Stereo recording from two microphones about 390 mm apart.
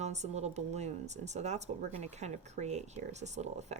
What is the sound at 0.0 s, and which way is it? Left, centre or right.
Speech, centre.